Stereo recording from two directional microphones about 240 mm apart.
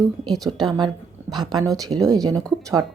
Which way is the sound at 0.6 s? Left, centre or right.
Centre.